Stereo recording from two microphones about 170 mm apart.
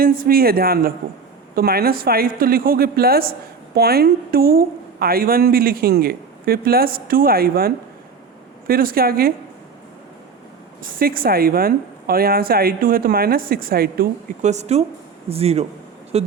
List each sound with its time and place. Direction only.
0.0 s a woman's voice: 60° right (ahead or behind)
10.8 s a woman's voice: 55° right (ahead or behind)
14.4 s speech: 40° right (ahead or behind)